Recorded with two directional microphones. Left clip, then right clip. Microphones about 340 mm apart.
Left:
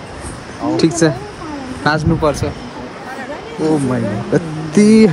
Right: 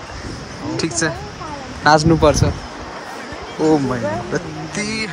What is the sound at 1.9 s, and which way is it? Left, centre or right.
Speech, right.